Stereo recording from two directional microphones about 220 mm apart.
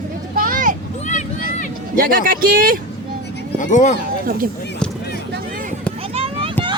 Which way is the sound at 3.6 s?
35° left (ahead or behind).